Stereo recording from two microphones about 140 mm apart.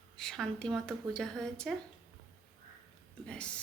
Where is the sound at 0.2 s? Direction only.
5° left (ahead or behind).